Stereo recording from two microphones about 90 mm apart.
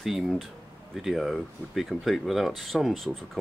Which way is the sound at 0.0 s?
5° right (ahead or behind).